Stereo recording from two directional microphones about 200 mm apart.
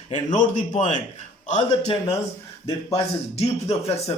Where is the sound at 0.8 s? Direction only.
40° left (ahead or behind).